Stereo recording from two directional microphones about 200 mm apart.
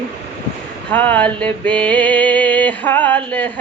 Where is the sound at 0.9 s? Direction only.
10° left (ahead or behind).